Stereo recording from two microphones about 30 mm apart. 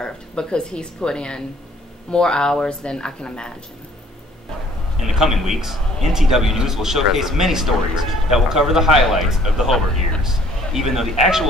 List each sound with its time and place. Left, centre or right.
0.0 s a woman's voice: left
5.0 s a man's voice: centre